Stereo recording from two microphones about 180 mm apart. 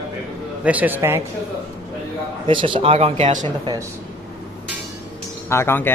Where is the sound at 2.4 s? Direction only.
30° right (ahead or behind).